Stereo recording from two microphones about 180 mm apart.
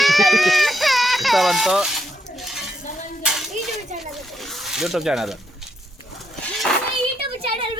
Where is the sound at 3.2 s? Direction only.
Centre (ahead or behind).